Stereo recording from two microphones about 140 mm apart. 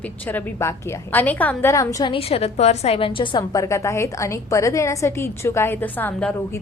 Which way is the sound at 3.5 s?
20° left (ahead or behind).